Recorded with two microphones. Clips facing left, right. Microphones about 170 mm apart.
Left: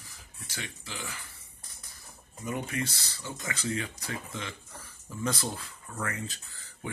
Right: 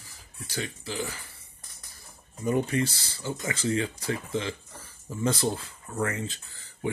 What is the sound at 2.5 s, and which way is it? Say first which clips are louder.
Speech: right 8 dB; 30° right (ahead or behind).